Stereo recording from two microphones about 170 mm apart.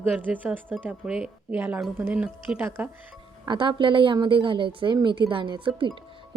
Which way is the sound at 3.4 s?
30° right (ahead or behind).